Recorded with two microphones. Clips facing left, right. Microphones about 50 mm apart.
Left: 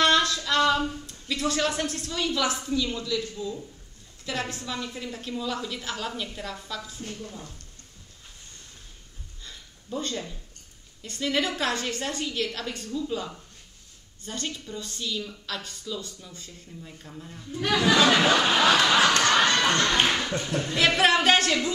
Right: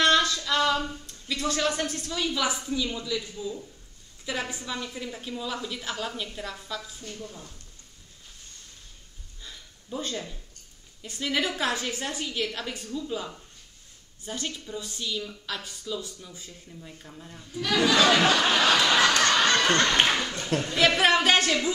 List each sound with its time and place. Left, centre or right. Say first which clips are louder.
0.0 s a woman's voice: even; centre
7.2 s speech: left 2 dB; centre
9.4 s a sound: right 1 dB; centre
11.0 s a woman's voice: left 1 dB; centre
17.8 s speech: left 1 dB; centre
18.1 s a sound: left 1 dB; centre
19.9 s a sound: even; centre
20.2 s speech: left 3 dB; centre
20.7 s speech: even; centre